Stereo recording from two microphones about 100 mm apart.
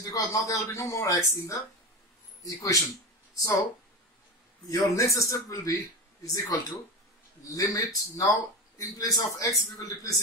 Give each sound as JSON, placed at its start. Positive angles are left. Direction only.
{"t": 0.0, "sound": "speech", "side_deg": 35}
{"t": 4.6, "sound": "speech", "side_deg": 30}